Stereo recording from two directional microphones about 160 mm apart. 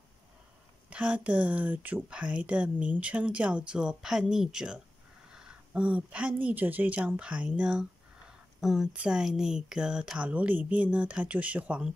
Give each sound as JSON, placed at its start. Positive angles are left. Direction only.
{"t": 0.8, "sound": "speech", "side_deg": -10}